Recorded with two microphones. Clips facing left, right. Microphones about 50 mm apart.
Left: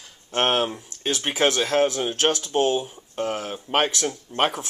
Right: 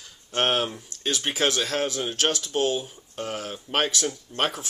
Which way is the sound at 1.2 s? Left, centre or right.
Centre.